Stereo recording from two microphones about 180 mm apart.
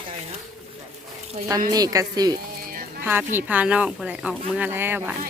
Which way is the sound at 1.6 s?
20° right (ahead or behind).